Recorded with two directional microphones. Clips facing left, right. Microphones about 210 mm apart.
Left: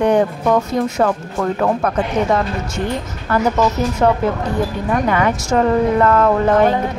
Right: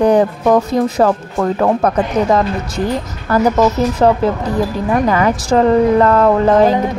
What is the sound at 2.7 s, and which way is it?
Speech, 35° right (ahead or behind).